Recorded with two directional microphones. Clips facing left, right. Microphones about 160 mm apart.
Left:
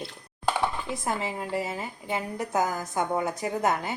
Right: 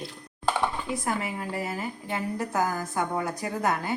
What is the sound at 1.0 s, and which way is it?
A woman's voice, 25° left (ahead or behind).